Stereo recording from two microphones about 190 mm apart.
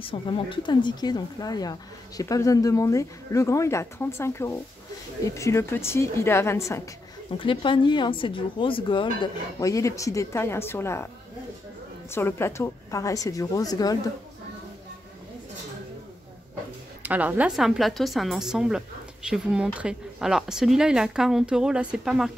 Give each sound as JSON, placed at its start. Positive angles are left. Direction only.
{"t": 0.0, "sound": "speech", "side_deg": 25}
{"t": 7.2, "sound": "speech", "side_deg": 25}
{"t": 12.1, "sound": "speech", "side_deg": 10}
{"t": 17.0, "sound": "speech", "side_deg": -10}